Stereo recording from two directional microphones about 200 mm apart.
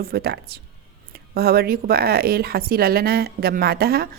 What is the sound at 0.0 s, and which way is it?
Speech, 50° right (ahead or behind).